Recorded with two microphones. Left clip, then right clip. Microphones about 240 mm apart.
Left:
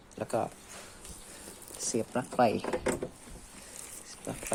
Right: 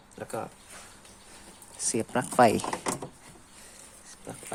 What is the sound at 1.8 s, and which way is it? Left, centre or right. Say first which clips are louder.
Speech: right 3 dB; centre.